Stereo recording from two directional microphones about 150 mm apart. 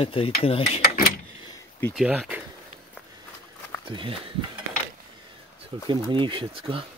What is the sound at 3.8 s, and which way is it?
Speech, 35° right (ahead or behind).